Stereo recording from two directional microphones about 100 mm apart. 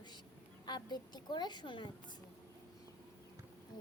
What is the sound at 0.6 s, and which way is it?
Child singing, 45° left (ahead or behind).